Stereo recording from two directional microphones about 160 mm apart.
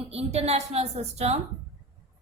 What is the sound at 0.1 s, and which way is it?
A woman's voice, 40° right (ahead or behind).